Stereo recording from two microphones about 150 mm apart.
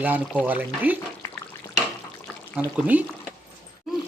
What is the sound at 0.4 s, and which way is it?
Speech, 10° right (ahead or behind).